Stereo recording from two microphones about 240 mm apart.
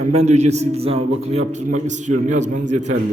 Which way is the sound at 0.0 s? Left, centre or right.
Right.